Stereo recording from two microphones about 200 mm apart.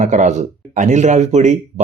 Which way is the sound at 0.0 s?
35° right (ahead or behind).